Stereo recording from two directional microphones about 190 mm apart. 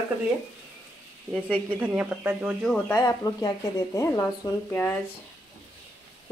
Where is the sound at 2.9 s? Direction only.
20° left (ahead or behind).